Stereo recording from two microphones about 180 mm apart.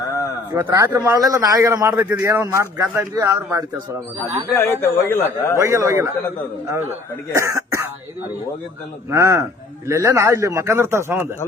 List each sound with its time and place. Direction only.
0.5 s a man's voice: 15° right (ahead or behind)
4.5 s a man's voice: 15° left (ahead or behind)
5.5 s a man's voice: 15° right (ahead or behind)
7.3 s cough: 15° right (ahead or behind)
9.0 s a man's voice: 15° right (ahead or behind)